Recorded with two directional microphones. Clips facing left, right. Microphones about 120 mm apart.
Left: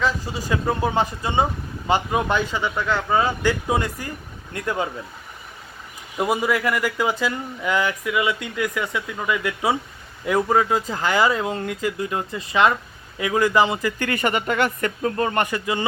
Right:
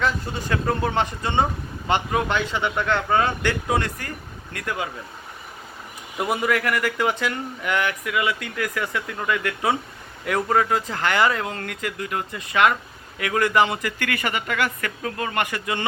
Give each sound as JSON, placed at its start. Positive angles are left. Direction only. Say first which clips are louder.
{"t": 0.0, "sound": "speech", "louder": "left 1 dB", "side_deg": 5}
{"t": 6.1, "sound": "speech", "louder": "left 1 dB", "side_deg": 15}